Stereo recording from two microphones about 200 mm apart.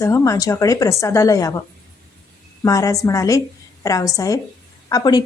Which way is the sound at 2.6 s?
15° left (ahead or behind).